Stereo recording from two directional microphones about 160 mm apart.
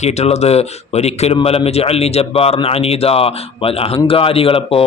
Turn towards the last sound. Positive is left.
turn(degrees=35)  # may be behind; listen again after turning